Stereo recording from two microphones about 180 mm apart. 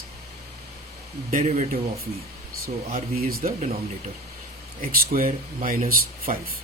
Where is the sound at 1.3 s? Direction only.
45° right (ahead or behind).